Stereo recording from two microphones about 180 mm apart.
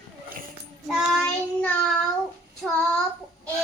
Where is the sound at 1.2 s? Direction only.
5° left (ahead or behind).